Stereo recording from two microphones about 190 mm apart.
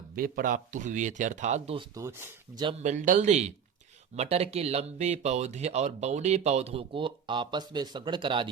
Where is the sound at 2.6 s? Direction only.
35° right (ahead or behind).